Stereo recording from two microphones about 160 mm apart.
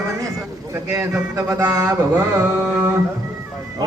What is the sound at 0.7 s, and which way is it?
Mantra, 20° right (ahead or behind).